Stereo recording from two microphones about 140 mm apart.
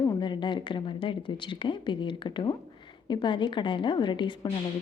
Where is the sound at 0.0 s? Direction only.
30° left (ahead or behind).